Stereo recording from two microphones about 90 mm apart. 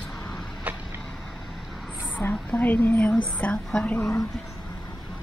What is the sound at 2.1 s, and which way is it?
A woman's voice, 15° left (ahead or behind).